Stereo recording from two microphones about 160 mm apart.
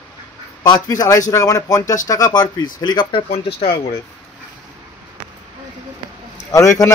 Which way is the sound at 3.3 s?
40° left (ahead or behind).